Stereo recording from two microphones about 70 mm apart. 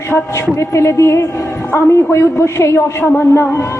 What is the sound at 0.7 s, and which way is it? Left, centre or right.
A woman's voice, left.